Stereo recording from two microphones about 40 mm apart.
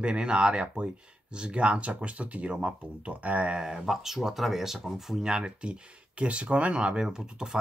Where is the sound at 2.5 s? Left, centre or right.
Right.